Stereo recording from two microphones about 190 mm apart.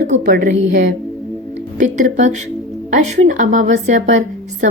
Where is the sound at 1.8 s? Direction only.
40° right (ahead or behind).